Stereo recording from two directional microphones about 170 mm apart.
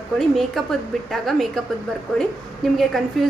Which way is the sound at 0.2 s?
Centre (ahead or behind).